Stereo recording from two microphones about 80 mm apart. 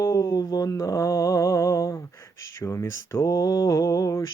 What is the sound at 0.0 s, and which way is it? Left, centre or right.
Mantra, left.